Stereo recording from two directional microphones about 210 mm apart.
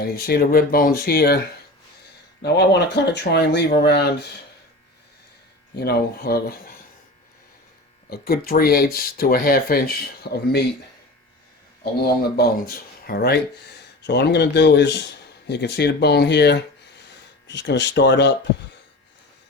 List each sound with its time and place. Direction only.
0.0 s speech: 45° left (ahead or behind)
2.4 s speech: 50° left (ahead or behind)
5.8 s speech: 50° left (ahead or behind)
8.1 s speech: 45° left (ahead or behind)
12.4 s speech: 45° left (ahead or behind)